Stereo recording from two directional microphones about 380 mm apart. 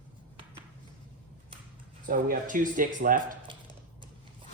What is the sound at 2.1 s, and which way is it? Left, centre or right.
Speech, right.